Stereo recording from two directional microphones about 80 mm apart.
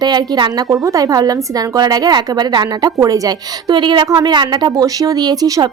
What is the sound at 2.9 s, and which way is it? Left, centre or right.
Speech, right.